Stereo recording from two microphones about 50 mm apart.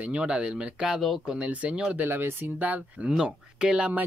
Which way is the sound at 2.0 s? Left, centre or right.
Right.